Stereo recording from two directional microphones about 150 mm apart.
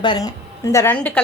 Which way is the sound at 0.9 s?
5° left (ahead or behind).